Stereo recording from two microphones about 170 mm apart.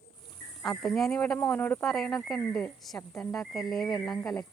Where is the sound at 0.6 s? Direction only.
Centre (ahead or behind).